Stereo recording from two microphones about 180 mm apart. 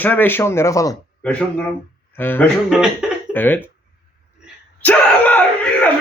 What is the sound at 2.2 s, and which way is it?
Speech, 10° left (ahead or behind).